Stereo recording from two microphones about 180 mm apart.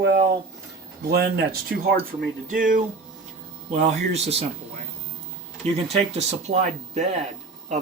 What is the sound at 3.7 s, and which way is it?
Speech, 40° right (ahead or behind).